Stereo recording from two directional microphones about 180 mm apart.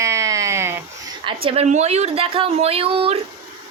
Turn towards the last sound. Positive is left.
turn(degrees=-30)  # may be behind; listen again after turning